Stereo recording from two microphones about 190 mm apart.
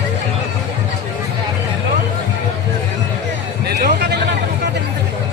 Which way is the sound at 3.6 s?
60° right (ahead or behind).